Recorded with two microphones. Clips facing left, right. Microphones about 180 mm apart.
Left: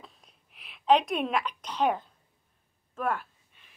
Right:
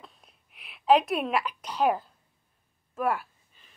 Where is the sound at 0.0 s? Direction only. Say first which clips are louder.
Even; centre (ahead or behind).